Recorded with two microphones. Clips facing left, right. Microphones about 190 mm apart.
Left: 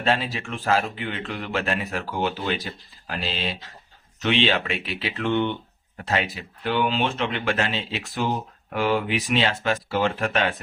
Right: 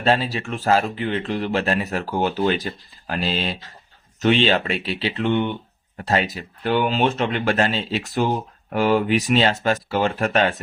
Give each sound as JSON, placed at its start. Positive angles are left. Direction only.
{"t": 0.0, "sound": "speech", "side_deg": -35}
{"t": 5.3, "sound": "speech", "side_deg": -15}
{"t": 6.1, "sound": "speech", "side_deg": -40}